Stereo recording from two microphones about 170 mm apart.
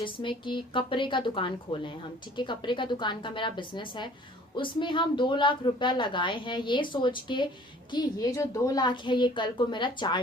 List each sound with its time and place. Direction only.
0.0 s a woman's voice: 30° left (ahead or behind)